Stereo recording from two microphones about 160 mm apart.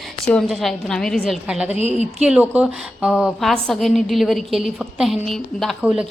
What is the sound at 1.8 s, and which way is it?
Speech, 45° right (ahead or behind).